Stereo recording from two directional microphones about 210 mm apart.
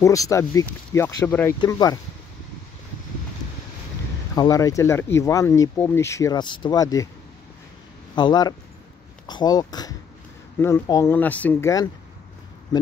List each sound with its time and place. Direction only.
0.0 s speech: 15° left (ahead or behind)
4.4 s speech: 15° left (ahead or behind)
8.2 s speech: 20° left (ahead or behind)